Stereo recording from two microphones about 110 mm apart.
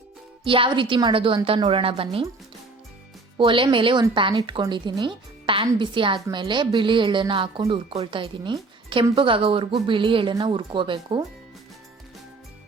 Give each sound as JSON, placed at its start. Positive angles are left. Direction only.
{"t": 0.4, "sound": "speech", "side_deg": -50}
{"t": 3.3, "sound": "speech", "side_deg": -50}